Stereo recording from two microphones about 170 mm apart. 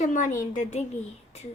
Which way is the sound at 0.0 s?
50° left (ahead or behind).